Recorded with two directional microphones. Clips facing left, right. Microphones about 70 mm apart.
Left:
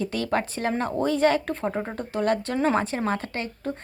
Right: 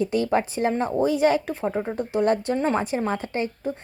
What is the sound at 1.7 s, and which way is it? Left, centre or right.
Speech, centre.